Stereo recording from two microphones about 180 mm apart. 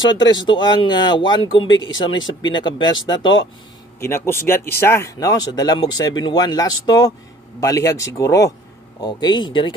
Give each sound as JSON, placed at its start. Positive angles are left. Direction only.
{"t": 0.0, "sound": "speech", "side_deg": 25}
{"t": 4.0, "sound": "speech", "side_deg": 15}